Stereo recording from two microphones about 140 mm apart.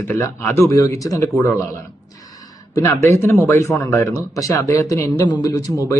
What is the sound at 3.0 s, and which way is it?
Speech, 20° left (ahead or behind).